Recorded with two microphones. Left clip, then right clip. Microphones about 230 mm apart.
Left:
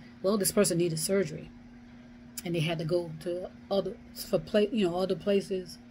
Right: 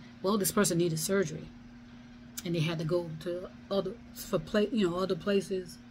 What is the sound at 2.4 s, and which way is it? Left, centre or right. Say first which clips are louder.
Speech: left 2 dB; centre.